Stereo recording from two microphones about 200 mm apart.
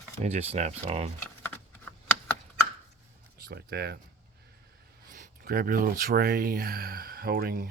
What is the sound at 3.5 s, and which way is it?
Speech, 50° right (ahead or behind).